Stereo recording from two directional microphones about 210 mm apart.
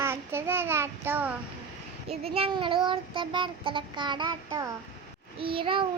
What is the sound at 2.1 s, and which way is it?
Child singing, 30° right (ahead or behind).